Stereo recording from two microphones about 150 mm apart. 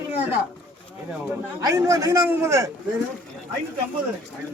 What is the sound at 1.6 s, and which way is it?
A man's voice, 25° right (ahead or behind).